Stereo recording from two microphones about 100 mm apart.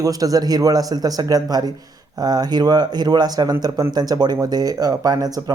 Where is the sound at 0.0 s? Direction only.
35° right (ahead or behind).